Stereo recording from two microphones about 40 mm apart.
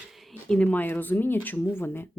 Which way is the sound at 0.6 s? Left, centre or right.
Left.